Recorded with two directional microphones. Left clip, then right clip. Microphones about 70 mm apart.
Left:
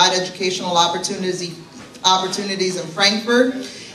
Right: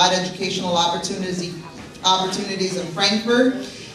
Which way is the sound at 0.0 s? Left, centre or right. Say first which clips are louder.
Left 2 dB; left.